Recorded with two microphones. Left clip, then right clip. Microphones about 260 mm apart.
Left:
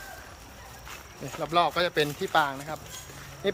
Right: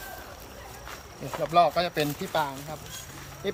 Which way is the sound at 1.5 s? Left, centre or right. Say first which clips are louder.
Right 2 dB; centre.